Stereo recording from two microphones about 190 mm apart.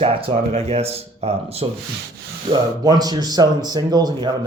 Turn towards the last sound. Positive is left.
turn(degrees=-20)  # may be behind; listen again after turning